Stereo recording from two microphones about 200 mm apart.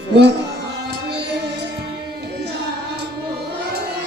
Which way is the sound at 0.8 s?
55° right (ahead or behind).